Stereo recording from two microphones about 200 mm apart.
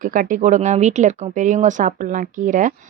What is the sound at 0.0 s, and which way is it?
Speech, 40° right (ahead or behind).